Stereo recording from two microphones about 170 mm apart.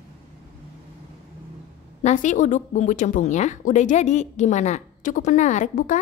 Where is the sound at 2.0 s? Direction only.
45° left (ahead or behind).